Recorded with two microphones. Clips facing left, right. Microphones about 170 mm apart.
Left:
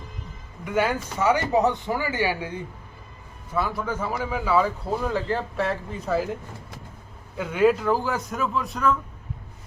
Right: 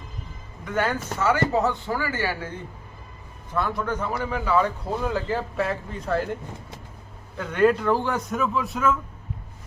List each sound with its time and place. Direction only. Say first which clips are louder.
0.6 s a man's voice: left 2 dB; 10° left (ahead or behind)
7.3 s a man's voice: even; 5° left (ahead or behind)